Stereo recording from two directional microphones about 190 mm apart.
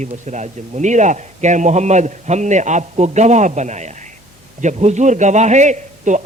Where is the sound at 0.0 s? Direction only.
40° right (ahead or behind).